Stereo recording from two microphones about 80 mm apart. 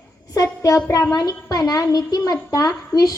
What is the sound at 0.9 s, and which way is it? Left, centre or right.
A woman's voice, left.